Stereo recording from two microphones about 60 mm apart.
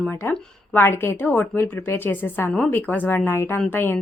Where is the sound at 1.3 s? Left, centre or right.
Left.